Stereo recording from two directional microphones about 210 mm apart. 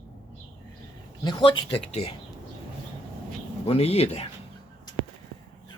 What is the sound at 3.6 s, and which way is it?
Speech, 30° left (ahead or behind).